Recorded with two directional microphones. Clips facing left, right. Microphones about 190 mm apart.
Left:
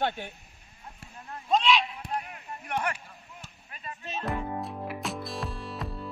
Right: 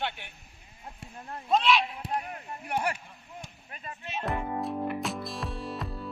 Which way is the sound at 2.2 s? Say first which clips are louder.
Right 3 dB; 40° right (ahead or behind).